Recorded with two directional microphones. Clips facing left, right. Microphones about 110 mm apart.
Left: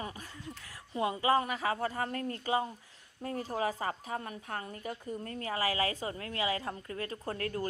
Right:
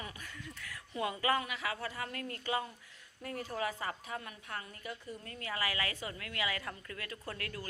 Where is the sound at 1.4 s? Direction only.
40° left (ahead or behind).